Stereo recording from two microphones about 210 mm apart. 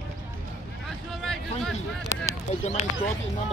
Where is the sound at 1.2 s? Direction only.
Centre (ahead or behind).